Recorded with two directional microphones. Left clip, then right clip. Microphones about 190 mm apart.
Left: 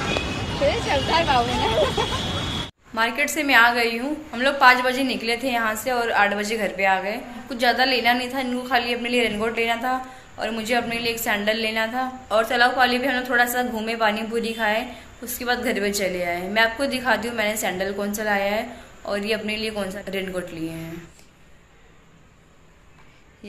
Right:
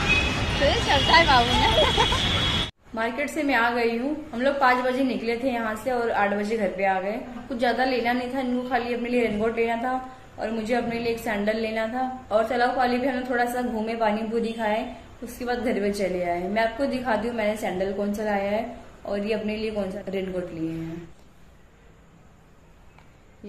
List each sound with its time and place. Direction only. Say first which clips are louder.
0.7 s speech: right 1 dB; 25° left (ahead or behind)
2.9 s a woman's voice: left 7 dB; 10° right (ahead or behind)